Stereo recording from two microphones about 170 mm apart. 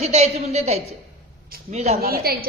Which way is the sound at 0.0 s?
40° right (ahead or behind).